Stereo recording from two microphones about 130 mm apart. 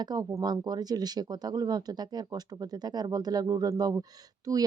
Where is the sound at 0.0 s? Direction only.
30° right (ahead or behind).